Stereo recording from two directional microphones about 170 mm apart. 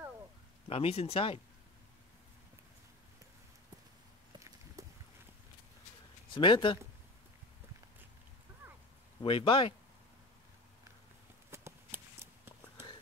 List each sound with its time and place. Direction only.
0.7 s speech: 35° left (ahead or behind)
4.8 s a sound: 20° right (ahead or behind)
6.3 s speech: 30° left (ahead or behind)
9.2 s speech: 30° left (ahead or behind)
11.5 s clip-clop: 15° right (ahead or behind)